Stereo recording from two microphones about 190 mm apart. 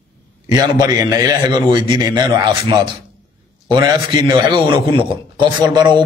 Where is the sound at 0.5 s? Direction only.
20° right (ahead or behind).